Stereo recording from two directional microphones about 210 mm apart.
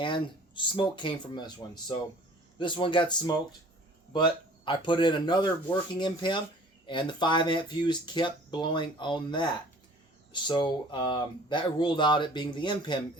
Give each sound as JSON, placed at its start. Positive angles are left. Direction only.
{"t": 0.0, "sound": "speech", "side_deg": 25}
{"t": 4.6, "sound": "speech", "side_deg": 20}